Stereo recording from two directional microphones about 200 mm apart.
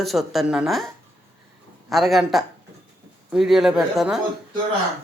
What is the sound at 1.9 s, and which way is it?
Speech, centre (ahead or behind).